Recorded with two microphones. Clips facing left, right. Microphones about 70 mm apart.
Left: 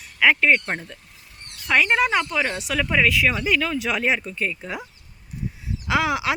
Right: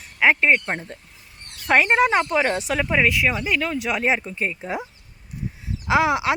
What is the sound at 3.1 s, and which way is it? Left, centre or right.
Speech, centre.